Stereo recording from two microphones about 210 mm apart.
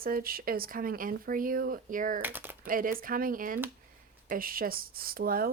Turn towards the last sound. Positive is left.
turn(degrees=-45)  # may be behind; listen again after turning